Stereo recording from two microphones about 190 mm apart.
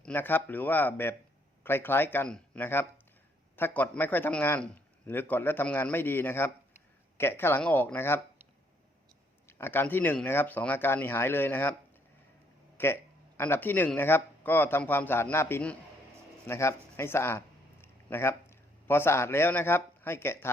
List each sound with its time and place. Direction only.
0.0 s speech: 10° left (ahead or behind)
9.5 s speech: 10° left (ahead or behind)
12.7 s speech: 10° left (ahead or behind)